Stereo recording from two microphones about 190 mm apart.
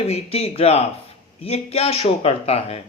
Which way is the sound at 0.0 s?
35° left (ahead or behind).